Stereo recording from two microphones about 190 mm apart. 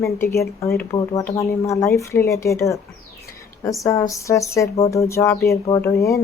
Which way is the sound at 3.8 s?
15° left (ahead or behind).